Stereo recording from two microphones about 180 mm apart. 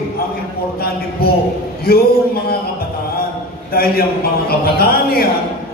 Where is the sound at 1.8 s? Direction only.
60° left (ahead or behind).